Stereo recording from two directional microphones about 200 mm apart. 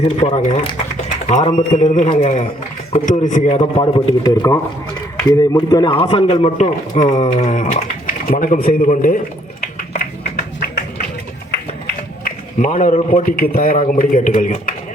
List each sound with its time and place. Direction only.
0.0 s a man's voice: 30° left (ahead or behind)
4.2 s a man's voice: 15° left (ahead or behind); by 11.0 s 50° left (ahead or behind)
12.2 s a man's voice: 40° left (ahead or behind)